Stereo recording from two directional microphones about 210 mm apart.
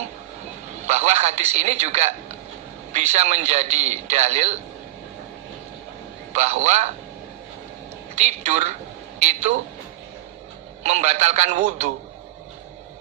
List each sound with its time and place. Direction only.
0.9 s a man's voice: 30° right (ahead or behind)
6.3 s a man's voice: 30° right (ahead or behind)
8.1 s a man's voice: 35° right (ahead or behind)
10.8 s a man's voice: 30° right (ahead or behind)